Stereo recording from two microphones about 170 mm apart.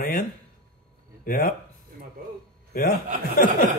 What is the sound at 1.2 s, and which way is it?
Speech, 55° left (ahead or behind).